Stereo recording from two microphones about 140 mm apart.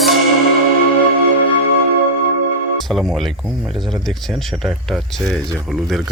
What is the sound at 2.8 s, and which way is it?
Speech, centre (ahead or behind).